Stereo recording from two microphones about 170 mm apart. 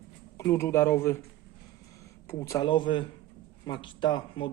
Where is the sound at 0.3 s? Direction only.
15° left (ahead or behind).